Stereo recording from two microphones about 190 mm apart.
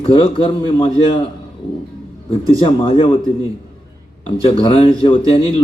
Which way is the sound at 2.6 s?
30° left (ahead or behind).